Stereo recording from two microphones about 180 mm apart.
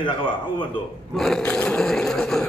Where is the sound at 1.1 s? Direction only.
Centre (ahead or behind).